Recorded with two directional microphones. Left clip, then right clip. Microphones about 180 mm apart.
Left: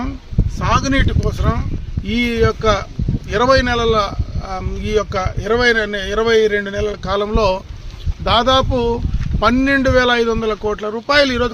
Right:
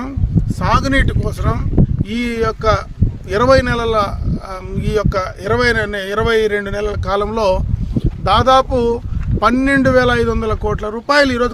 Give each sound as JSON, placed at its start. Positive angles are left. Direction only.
{"t": 0.6, "sound": "speech", "side_deg": -25}